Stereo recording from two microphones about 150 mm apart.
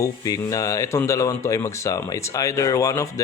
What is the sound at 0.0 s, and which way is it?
Speech, 20° left (ahead or behind).